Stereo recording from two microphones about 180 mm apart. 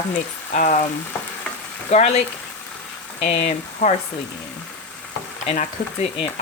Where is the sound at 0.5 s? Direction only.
40° left (ahead or behind).